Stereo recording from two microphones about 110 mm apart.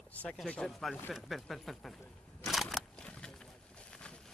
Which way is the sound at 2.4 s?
Centre (ahead or behind).